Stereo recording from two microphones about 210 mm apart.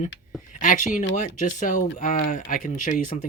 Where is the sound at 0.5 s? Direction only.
40° left (ahead or behind).